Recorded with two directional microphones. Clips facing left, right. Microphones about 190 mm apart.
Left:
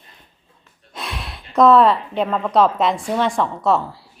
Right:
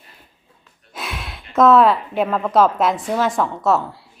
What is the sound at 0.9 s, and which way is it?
A woman's voice, centre (ahead or behind).